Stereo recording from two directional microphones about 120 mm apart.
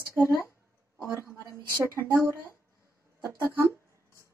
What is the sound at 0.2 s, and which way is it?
Speech, 25° right (ahead or behind).